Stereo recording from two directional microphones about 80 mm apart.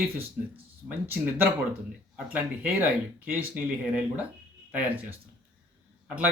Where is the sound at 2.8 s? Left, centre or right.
Right.